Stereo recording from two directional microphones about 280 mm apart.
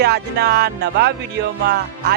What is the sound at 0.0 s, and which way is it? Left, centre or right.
Speech, right.